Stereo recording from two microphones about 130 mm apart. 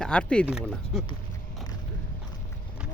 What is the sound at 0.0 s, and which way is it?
Speech, 10° left (ahead or behind).